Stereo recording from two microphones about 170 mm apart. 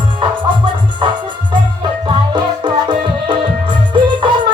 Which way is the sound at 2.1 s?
25° right (ahead or behind).